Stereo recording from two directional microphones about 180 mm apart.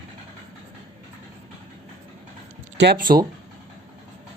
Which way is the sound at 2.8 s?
60° right (ahead or behind).